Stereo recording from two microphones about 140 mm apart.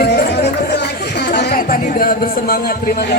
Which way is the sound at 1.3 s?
80° left.